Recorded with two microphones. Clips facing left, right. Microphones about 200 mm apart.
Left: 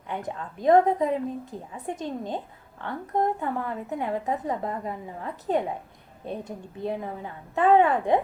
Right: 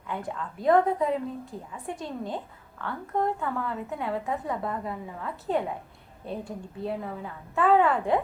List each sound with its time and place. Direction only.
0.1 s a woman's voice: 20° left (ahead or behind)